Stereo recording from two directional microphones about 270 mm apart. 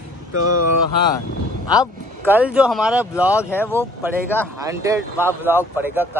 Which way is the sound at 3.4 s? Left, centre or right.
Centre.